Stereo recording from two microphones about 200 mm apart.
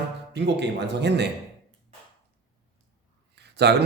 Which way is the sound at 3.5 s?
55° right (ahead or behind).